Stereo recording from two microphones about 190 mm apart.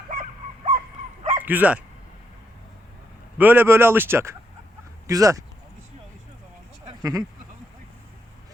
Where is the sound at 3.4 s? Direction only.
10° right (ahead or behind).